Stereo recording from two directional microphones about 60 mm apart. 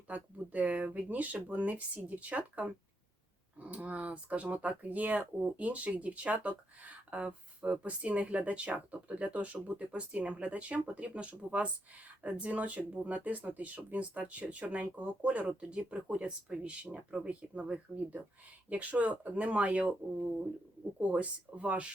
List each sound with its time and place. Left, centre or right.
0.1 s speech: right
21.0 s speech: right